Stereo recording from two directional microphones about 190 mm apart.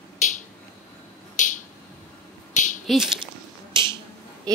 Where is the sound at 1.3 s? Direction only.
40° left (ahead or behind).